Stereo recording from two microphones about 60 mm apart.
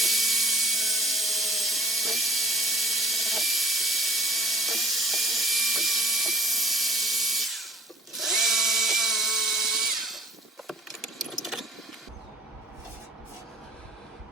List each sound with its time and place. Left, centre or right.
0.0 s wood: centre
8.1 s drill: centre
10.7 s keys jangling: centre